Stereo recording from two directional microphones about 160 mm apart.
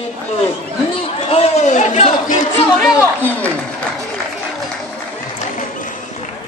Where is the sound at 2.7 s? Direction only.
Centre (ahead or behind).